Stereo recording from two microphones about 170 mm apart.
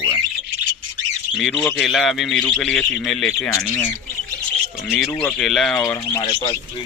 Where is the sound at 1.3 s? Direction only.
5° right (ahead or behind).